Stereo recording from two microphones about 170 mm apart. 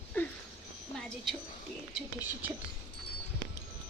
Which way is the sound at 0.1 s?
10° left (ahead or behind).